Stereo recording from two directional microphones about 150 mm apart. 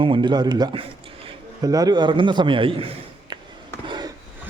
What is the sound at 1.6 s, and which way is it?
A man's voice, 25° right (ahead or behind).